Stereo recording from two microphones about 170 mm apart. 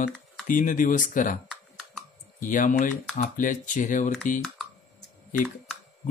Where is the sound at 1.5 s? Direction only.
Centre (ahead or behind).